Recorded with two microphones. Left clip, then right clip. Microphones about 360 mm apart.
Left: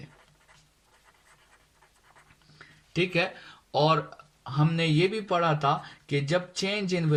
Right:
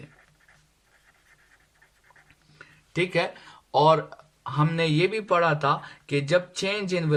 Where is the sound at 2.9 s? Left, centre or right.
Centre.